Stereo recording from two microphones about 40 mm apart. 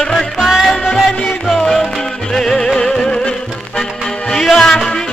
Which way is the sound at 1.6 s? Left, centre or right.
Centre.